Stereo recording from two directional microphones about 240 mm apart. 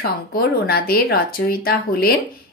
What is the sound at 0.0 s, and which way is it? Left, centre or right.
A woman's voice, left.